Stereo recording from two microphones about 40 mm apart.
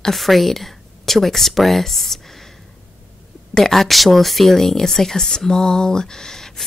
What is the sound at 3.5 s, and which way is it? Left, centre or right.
Speech, centre.